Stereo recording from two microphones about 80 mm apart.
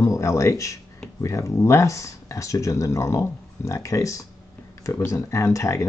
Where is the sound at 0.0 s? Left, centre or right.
Left.